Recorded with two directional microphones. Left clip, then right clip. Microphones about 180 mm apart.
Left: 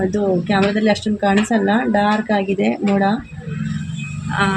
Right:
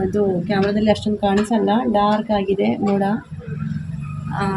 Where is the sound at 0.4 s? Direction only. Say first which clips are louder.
Left 2 dB; 30° left (ahead or behind).